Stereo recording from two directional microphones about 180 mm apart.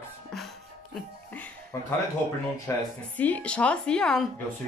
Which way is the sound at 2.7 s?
15° left (ahead or behind).